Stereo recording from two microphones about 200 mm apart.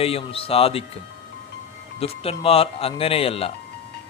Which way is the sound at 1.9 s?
30° left (ahead or behind).